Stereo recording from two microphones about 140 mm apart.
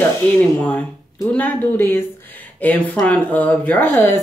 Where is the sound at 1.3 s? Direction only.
15° left (ahead or behind).